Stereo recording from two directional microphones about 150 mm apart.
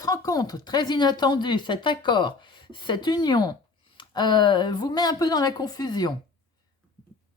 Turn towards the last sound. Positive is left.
turn(degrees=25)  # may be behind; listen again after turning